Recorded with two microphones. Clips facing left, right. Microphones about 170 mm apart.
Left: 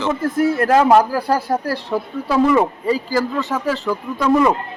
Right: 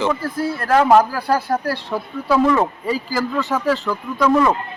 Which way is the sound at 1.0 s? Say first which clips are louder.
Left 1 dB; 15° left (ahead or behind).